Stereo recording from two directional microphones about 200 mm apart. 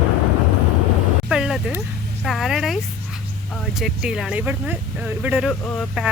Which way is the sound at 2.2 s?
Centre (ahead or behind).